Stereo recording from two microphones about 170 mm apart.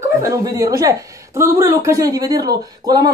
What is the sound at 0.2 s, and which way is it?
A woman's voice, 20° right (ahead or behind).